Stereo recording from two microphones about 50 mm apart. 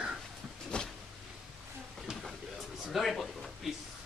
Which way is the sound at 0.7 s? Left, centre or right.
Centre.